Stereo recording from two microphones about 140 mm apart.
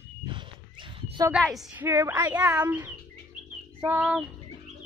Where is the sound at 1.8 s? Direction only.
20° right (ahead or behind).